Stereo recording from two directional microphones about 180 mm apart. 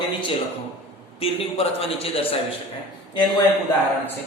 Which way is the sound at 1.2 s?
30° left (ahead or behind).